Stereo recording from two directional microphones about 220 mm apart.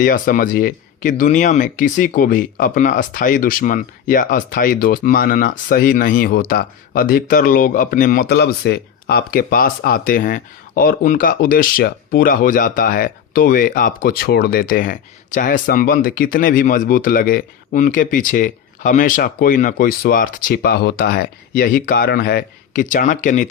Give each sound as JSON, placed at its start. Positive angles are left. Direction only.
{"t": 0.0, "sound": "speech", "side_deg": 40}